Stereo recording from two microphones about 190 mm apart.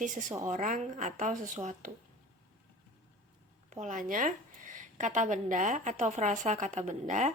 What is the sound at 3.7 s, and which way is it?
Speech, 40° right (ahead or behind).